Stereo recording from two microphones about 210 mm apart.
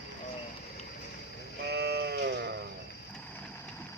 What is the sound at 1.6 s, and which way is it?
Sheep, 50° right (ahead or behind).